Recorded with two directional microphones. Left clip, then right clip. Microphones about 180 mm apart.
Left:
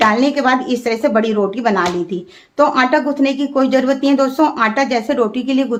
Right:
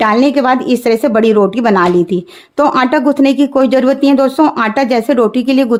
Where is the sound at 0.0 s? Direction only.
45° right (ahead or behind).